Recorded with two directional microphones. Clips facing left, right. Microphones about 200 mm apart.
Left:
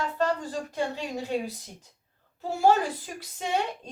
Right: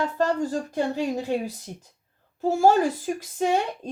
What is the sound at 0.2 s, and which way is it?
Speech, 45° right (ahead or behind).